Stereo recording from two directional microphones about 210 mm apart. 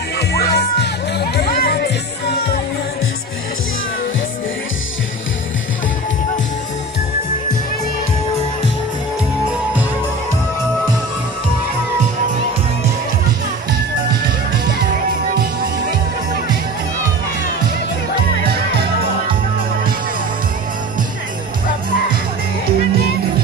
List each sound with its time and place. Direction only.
0.3 s music: 50° left (ahead or behind)
18.4 s music: 50° right (ahead or behind)